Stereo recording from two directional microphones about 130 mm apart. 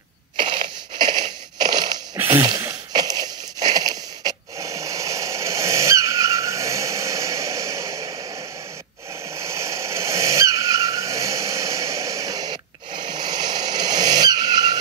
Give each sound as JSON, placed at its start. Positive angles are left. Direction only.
{"t": 0.4, "sound": "crushing", "side_deg": -35}
{"t": 2.2, "sound": "a sound", "side_deg": -35}
{"t": 9.3, "sound": "vehicle", "side_deg": -25}